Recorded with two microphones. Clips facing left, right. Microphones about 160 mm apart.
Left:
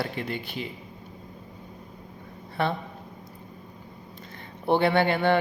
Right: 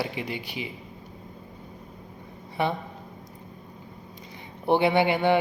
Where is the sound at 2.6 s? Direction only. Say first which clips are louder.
Even; 15° right (ahead or behind).